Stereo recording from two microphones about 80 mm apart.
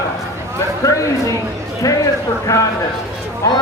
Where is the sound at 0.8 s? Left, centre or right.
Left.